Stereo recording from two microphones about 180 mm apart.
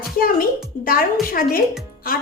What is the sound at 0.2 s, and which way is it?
A woman's voice, 55° left (ahead or behind).